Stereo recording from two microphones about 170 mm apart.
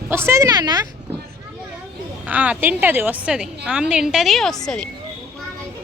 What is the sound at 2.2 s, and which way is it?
A woman's voice, 10° right (ahead or behind).